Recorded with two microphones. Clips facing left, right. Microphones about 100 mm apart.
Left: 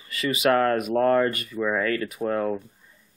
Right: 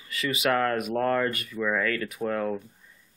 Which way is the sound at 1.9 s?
5° left (ahead or behind).